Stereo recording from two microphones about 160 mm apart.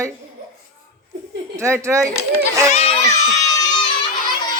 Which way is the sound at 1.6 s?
20° right (ahead or behind).